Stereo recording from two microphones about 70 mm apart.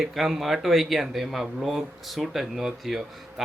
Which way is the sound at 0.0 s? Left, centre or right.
Centre.